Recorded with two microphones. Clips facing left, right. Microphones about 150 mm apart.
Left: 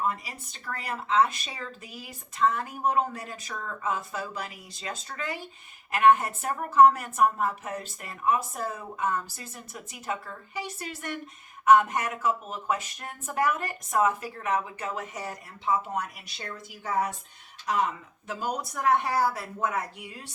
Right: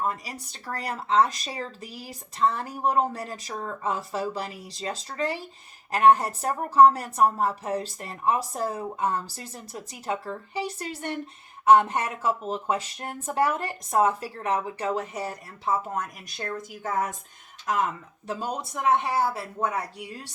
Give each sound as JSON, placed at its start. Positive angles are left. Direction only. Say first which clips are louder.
{"t": 0.1, "sound": "speech", "louder": "right 1 dB", "side_deg": -35}
{"t": 16.0, "sound": "speech", "louder": "right 1 dB", "side_deg": -45}
{"t": 18.3, "sound": "speech", "louder": "left 2 dB", "side_deg": -25}